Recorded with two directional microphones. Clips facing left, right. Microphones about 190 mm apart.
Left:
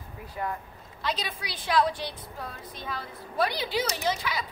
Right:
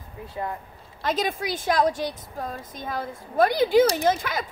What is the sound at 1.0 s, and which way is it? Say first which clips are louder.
A woman's voice: right 7 dB; 45° right (ahead or behind).